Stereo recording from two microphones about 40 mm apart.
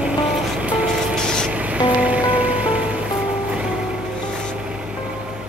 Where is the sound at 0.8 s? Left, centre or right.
Centre.